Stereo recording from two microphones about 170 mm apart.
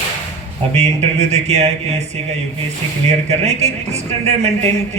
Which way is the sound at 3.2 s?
40° right (ahead or behind).